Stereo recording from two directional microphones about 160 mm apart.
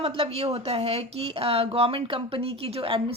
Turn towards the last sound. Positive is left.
turn(degrees=-35)  # may be behind; listen again after turning